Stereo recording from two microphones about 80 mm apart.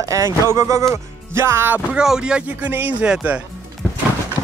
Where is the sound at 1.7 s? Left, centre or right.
Centre.